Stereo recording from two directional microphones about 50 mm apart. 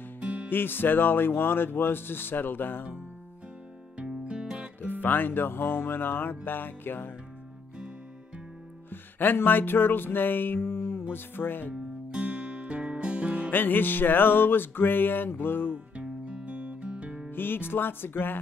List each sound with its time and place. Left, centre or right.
0.2 s music: right
0.5 s speech: left
4.0 s music: right
5.0 s speech: left
8.9 s music: left
12.1 s music: right
13.5 s speech: left
15.7 s music: centre
17.3 s speech: left